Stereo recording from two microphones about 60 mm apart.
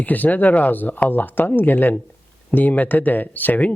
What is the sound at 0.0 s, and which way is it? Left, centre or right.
Speech, left.